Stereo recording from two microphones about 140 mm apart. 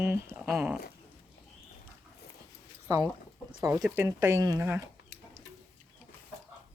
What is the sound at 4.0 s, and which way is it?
Speech, 20° right (ahead or behind).